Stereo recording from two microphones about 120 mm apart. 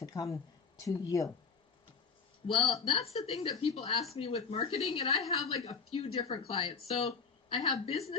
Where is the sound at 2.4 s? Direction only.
55° left (ahead or behind).